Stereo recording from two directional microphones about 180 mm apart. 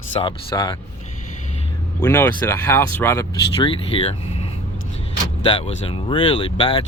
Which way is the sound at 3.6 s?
30° left (ahead or behind).